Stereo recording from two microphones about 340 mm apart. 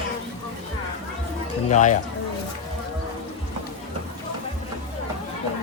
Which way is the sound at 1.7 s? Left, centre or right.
Left.